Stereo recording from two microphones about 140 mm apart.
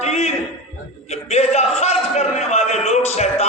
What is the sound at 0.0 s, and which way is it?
Speech, 50° left (ahead or behind).